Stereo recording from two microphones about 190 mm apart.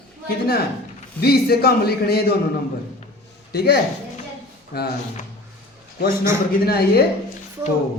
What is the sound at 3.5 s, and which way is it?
A man's voice, 55° left (ahead or behind).